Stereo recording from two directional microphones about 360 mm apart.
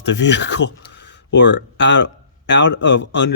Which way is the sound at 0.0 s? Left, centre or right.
Left.